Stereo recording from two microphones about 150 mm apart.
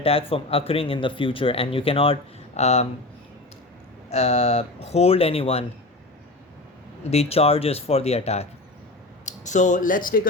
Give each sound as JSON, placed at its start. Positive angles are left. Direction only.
{"t": 0.0, "sound": "speech", "side_deg": 40}
{"t": 4.1, "sound": "speech", "side_deg": 45}
{"t": 7.0, "sound": "speech", "side_deg": 45}
{"t": 9.2, "sound": "speech", "side_deg": 55}